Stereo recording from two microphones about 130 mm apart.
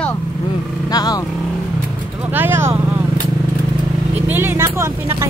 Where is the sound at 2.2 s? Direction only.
15° right (ahead or behind).